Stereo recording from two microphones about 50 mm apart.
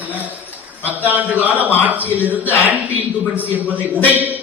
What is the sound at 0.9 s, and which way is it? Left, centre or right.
A man's voice, right.